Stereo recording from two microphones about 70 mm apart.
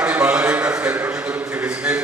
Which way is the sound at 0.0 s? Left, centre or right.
Centre.